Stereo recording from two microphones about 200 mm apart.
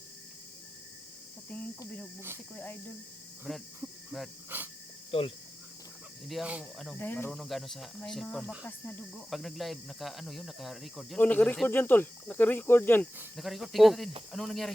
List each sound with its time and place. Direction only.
3.4 s speech: centre (ahead or behind)
5.1 s speech: 30° left (ahead or behind)
6.2 s speech: centre (ahead or behind)
13.1 s speech: centre (ahead or behind)